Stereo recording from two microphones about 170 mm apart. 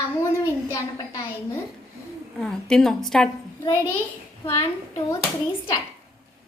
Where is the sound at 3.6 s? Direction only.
15° left (ahead or behind).